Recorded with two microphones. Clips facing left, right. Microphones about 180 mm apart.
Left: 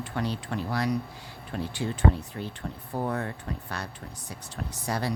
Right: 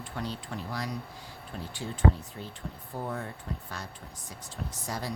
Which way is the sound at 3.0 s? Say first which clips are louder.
Left 6 dB; 75° left (ahead or behind).